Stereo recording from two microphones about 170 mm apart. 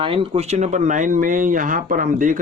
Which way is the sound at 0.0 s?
30° right (ahead or behind).